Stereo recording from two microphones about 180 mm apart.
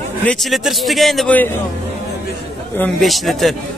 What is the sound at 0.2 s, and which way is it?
A man's voice, 5° left (ahead or behind).